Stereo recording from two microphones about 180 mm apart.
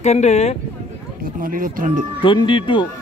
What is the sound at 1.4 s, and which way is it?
Speech, 50° right (ahead or behind).